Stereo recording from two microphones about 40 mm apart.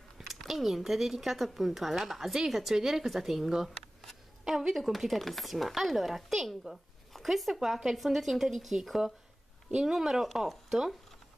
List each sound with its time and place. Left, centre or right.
0.5 s speech: centre
4.7 s speech: centre
9.8 s speech: centre
10.3 s speech: centre